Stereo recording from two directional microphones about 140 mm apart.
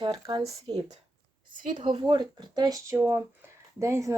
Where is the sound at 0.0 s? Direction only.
35° right (ahead or behind).